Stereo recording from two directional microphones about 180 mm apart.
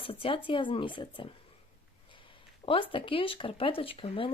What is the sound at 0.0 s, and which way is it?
Speech, 30° left (ahead or behind).